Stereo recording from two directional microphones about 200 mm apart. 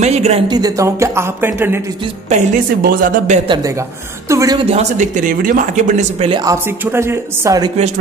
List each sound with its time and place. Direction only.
0.0 s a sound: 35° right (ahead or behind)
0.5 s a woman's voice: 20° right (ahead or behind)
2.8 s speech: 45° right (ahead or behind)
4.3 s a woman's voice: 15° right (ahead or behind)
4.6 s speech: 35° right (ahead or behind)
6.2 s a woman's voice: 20° right (ahead or behind)